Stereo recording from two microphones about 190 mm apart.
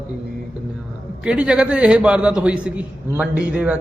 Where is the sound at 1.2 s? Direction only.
5° right (ahead or behind).